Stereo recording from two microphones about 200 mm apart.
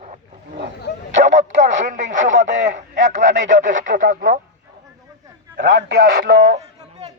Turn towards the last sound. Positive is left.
turn(degrees=-30)  # may be behind; listen again after turning